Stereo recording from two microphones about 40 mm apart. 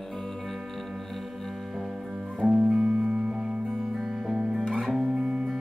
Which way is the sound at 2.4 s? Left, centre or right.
Centre.